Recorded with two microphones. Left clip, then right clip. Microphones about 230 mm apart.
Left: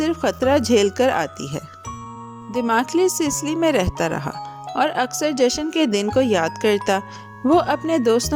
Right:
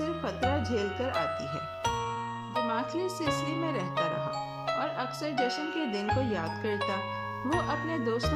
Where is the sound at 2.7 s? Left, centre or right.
Left.